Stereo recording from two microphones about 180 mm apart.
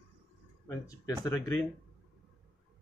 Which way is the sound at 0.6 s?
20° left (ahead or behind).